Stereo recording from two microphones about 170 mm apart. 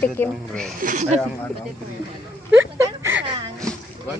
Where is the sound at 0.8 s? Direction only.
45° right (ahead or behind).